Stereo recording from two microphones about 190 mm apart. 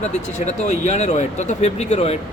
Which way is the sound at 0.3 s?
40° left (ahead or behind).